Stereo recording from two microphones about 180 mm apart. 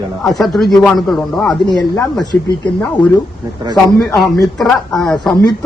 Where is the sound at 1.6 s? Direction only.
25° left (ahead or behind).